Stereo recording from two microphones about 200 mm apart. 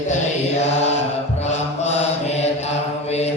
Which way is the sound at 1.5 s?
35° left (ahead or behind).